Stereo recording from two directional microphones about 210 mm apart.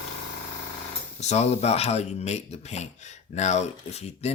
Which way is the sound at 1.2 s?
30° left (ahead or behind).